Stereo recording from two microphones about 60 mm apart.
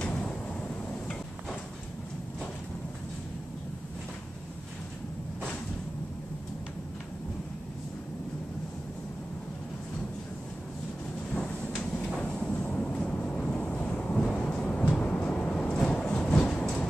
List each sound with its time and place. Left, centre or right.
0.0 s a sound: left
12.0 s vehicle: centre
16.0 s train: centre